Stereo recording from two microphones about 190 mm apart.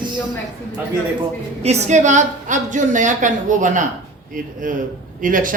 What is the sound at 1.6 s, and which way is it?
A woman's voice, 35° right (ahead or behind).